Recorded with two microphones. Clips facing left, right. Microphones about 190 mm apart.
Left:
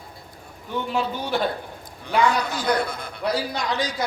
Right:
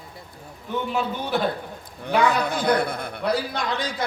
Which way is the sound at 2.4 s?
55° right (ahead or behind).